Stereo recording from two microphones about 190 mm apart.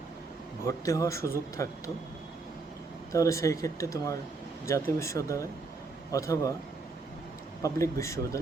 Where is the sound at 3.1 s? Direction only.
15° left (ahead or behind).